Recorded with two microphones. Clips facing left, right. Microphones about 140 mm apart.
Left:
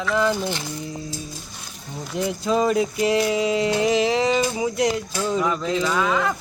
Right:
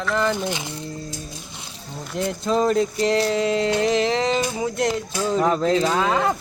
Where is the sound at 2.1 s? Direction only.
5° left (ahead or behind).